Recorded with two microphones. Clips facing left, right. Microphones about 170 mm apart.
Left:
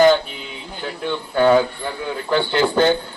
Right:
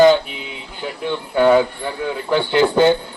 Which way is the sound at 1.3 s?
5° right (ahead or behind).